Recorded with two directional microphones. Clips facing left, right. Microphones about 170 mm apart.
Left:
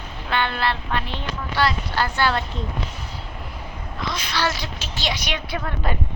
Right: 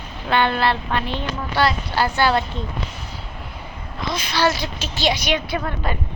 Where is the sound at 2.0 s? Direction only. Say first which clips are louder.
Right 4 dB; 10° right (ahead or behind).